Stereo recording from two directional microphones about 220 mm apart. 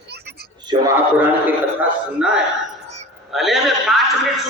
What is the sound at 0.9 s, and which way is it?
A man's voice, 10° right (ahead or behind).